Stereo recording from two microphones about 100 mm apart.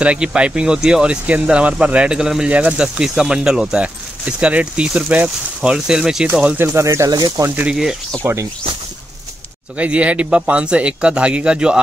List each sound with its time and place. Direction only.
0.0 s speech: 10° right (ahead or behind)
6.6 s speech: 25° right (ahead or behind)
8.2 s speech: 25° right (ahead or behind)
9.8 s speech: 15° right (ahead or behind)